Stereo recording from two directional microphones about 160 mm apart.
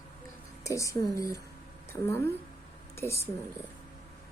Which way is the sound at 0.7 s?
20° left (ahead or behind).